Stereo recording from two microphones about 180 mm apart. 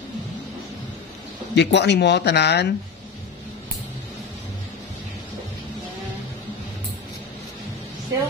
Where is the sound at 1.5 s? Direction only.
75° left (ahead or behind).